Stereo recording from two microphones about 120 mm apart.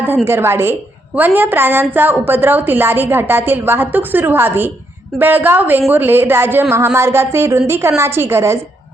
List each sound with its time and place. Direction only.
0.3 s a woman's voice: 20° right (ahead or behind)